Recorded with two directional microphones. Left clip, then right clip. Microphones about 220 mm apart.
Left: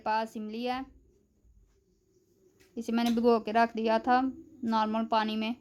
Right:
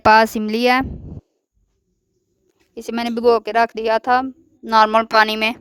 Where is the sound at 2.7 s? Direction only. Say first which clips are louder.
Right 7 dB; 50° right (ahead or behind).